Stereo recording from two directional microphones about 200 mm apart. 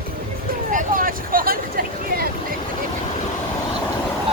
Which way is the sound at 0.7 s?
45° right (ahead or behind).